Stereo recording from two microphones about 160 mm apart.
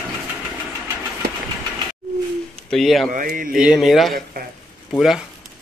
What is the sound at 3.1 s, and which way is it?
Speech, 60° right (ahead or behind).